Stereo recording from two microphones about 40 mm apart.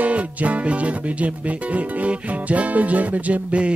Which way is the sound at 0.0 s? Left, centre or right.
Right.